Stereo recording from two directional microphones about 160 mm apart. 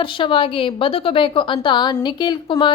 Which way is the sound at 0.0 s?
30° left (ahead or behind).